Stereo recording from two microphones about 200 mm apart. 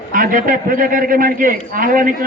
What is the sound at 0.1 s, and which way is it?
A man's voice, 40° right (ahead or behind).